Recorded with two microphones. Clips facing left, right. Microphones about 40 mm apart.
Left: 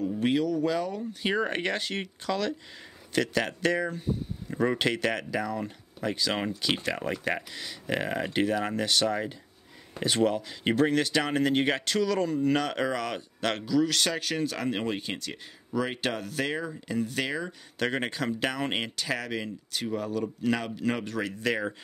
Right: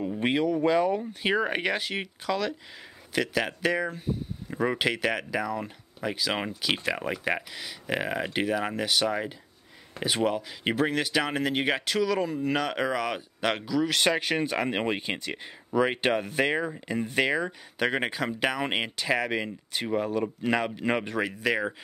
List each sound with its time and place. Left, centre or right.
0.0 s speech: right
1.3 s speech: centre